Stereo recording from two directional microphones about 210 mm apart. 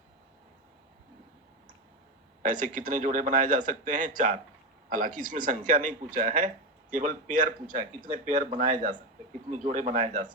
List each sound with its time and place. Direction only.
2.4 s speech: 40° right (ahead or behind)